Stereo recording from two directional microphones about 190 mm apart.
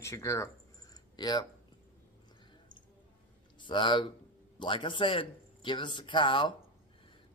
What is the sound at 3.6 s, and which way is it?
Speech, 25° left (ahead or behind).